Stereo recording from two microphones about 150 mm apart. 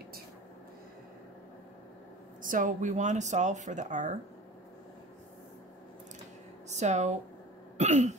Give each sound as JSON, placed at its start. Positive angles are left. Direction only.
{"t": 2.4, "sound": "speech", "side_deg": -60}
{"t": 6.7, "sound": "speech", "side_deg": -50}